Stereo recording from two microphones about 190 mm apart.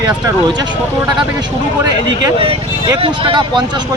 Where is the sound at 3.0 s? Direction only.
25° right (ahead or behind).